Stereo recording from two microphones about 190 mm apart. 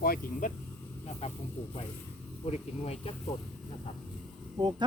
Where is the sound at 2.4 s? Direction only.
30° left (ahead or behind).